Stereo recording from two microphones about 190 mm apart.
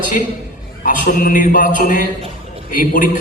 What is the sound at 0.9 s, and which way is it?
A man's voice, 45° left (ahead or behind).